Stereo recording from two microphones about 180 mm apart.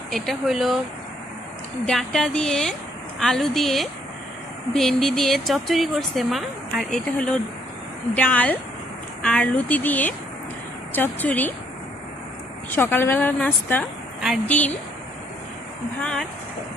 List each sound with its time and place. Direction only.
0.1 s speech: centre (ahead or behind)
1.8 s a woman's voice: 5° left (ahead or behind)
12.7 s a woman's voice: 10° left (ahead or behind)
16.0 s speech: 5° left (ahead or behind)